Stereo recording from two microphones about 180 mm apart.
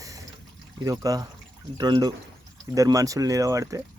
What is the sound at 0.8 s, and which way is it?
Speech, 20° right (ahead or behind).